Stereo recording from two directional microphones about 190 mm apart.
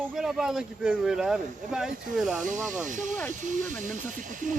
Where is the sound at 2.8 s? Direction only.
40° right (ahead or behind).